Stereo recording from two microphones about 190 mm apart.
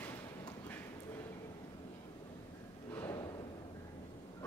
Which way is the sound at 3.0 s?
15° left (ahead or behind).